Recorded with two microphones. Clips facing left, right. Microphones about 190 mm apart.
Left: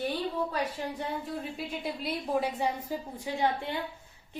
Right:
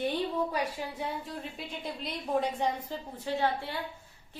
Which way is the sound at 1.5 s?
5° left (ahead or behind).